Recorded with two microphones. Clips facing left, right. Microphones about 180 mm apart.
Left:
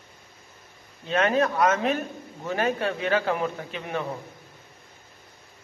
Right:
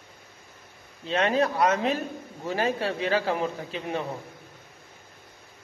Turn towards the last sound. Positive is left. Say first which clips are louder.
# even
turn(degrees=-30)  # may be behind; listen again after turning